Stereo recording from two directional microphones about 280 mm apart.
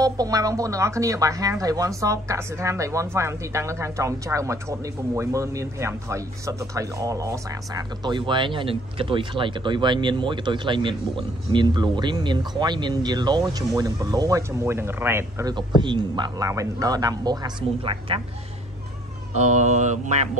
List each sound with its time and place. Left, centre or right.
0.0 s speech: centre
19.3 s speech: right